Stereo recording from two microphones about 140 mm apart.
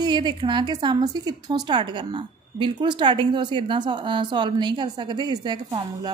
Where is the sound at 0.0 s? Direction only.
30° right (ahead or behind).